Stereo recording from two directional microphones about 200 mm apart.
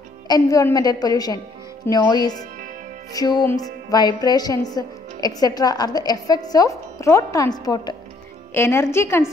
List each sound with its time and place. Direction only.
0.3 s a woman's voice: 15° left (ahead or behind)